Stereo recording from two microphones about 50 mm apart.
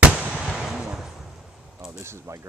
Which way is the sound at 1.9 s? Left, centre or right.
Right.